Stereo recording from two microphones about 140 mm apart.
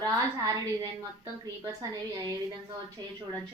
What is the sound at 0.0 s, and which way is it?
Speech, 25° right (ahead or behind).